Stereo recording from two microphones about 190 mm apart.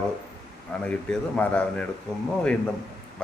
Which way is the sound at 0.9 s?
5° left (ahead or behind).